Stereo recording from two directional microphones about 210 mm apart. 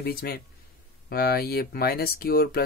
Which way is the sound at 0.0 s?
45° left (ahead or behind).